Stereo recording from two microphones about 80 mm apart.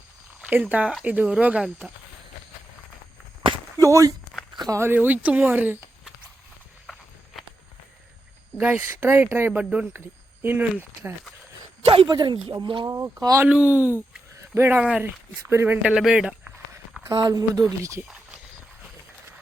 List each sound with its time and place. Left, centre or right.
0.4 s speech: centre
3.8 s speech: right
4.7 s speech: right
4.9 s speech: centre
8.5 s speech: right
9.5 s speech: centre
12.0 s speech: right
12.9 s speech: right
13.5 s speech: centre
14.3 s a sound: right
14.8 s speech: centre
15.4 s speech: right
15.8 s speech: centre
17.2 s speech: right